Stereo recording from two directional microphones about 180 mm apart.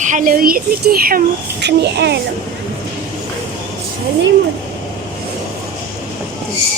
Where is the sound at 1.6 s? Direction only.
70° right (ahead or behind).